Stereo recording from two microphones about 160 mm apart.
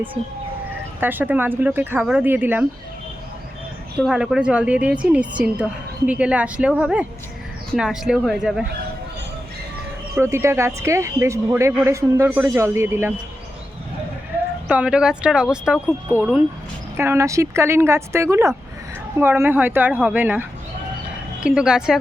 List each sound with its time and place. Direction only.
0.2 s speech: 40° right (ahead or behind)
0.9 s speech: 10° right (ahead or behind)
4.0 s speech: 5° right (ahead or behind)
10.2 s speech: 15° right (ahead or behind)
14.7 s speech: 5° right (ahead or behind)
21.4 s speech: 5° right (ahead or behind)